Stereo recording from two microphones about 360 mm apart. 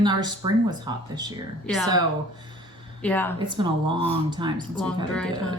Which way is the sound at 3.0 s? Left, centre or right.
Centre.